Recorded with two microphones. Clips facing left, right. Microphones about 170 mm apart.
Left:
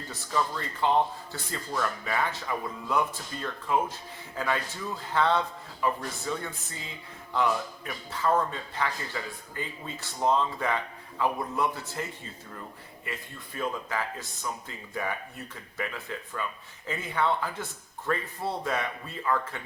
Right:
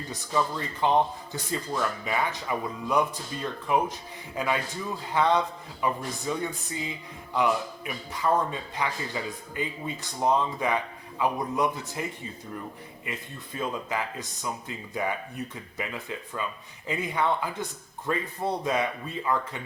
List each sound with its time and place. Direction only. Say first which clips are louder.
0.1 s speech: right 2 dB; 15° right (ahead or behind)